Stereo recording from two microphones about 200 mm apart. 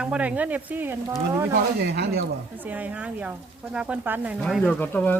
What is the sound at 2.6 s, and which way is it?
Speech, 10° right (ahead or behind).